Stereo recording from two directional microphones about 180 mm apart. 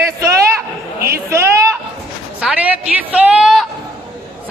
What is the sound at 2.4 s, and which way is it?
A woman's voice, 10° right (ahead or behind).